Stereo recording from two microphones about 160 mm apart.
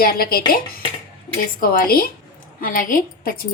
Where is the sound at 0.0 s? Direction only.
65° left (ahead or behind).